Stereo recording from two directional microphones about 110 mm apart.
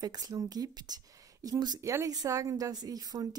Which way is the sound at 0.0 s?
35° right (ahead or behind).